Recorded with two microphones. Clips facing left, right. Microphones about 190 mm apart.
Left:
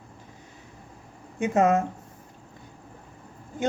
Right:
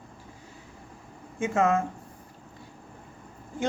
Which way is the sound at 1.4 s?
20° left (ahead or behind).